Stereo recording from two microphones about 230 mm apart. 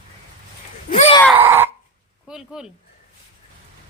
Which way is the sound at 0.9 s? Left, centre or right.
Left.